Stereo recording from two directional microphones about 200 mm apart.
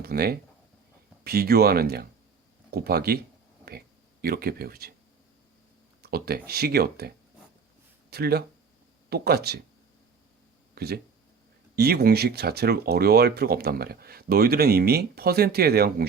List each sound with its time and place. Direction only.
0.0 s speech: 50° right (ahead or behind)
6.0 s speech: 50° right (ahead or behind)
8.1 s speech: 50° right (ahead or behind)
10.8 s speech: 50° right (ahead or behind)